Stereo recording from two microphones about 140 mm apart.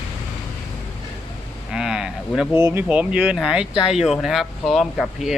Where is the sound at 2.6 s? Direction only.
15° right (ahead or behind); by 5.3 s centre (ahead or behind).